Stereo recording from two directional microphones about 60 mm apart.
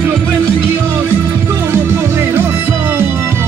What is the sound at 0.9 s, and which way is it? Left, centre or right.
Music, right.